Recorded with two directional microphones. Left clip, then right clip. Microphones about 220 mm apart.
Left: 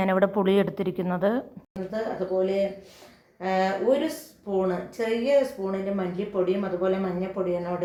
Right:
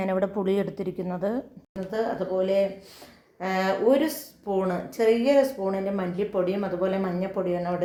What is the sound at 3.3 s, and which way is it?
A woman's voice, 40° right (ahead or behind).